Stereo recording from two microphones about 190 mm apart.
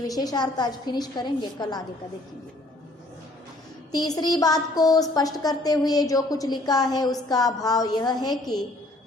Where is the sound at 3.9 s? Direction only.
20° left (ahead or behind).